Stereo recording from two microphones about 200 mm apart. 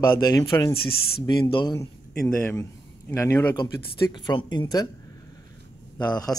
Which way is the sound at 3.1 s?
15° left (ahead or behind).